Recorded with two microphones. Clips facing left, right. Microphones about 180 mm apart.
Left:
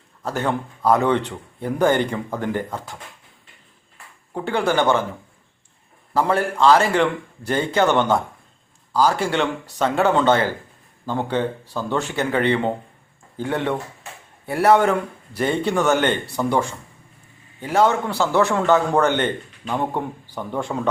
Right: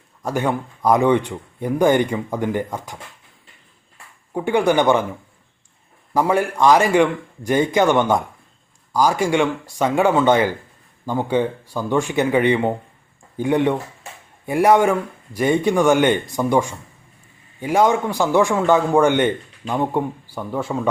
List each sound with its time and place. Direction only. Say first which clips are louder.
0.2 s a man's voice: right 2 dB; 10° right (ahead or behind)
4.4 s a man's voice: right 3 dB; 15° right (ahead or behind)
6.1 s a man's voice: right 2 dB; 15° right (ahead or behind)